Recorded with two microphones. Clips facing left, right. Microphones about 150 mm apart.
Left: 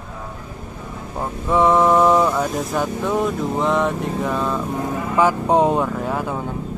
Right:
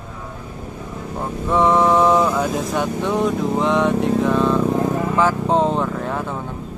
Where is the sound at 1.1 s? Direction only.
Centre (ahead or behind).